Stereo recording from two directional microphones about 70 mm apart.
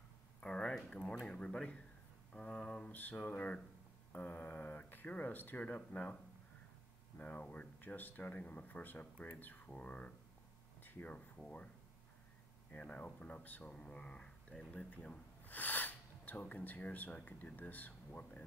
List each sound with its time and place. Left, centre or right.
0.4 s speech: centre
7.2 s speech: left
12.7 s speech: centre